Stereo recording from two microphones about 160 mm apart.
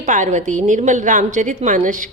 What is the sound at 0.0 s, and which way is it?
A woman's voice, 50° right (ahead or behind).